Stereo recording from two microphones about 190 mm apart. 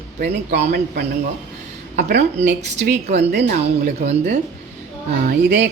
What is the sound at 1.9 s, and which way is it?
Speech, 55° right (ahead or behind).